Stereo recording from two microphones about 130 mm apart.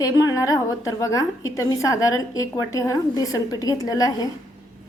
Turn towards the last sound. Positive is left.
turn(degrees=30)  # may be behind; listen again after turning